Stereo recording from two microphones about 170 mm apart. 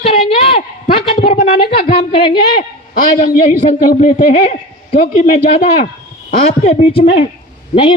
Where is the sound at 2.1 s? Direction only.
30° left (ahead or behind).